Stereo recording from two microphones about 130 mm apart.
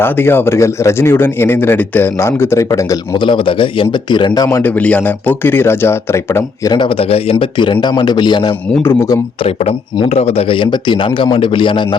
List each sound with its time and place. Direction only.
0.0 s speech: 15° left (ahead or behind)
3.2 s a man's voice: 40° left (ahead or behind)
4.4 s speech: 20° left (ahead or behind)
4.8 s speech: 10° left (ahead or behind)
6.7 s a man's voice: 45° left (ahead or behind)
8.8 s speech: 15° left (ahead or behind)
9.4 s a man's voice: 50° left (ahead or behind)